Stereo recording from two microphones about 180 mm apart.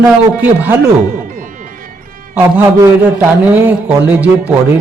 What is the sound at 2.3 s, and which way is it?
A man's voice, 10° right (ahead or behind).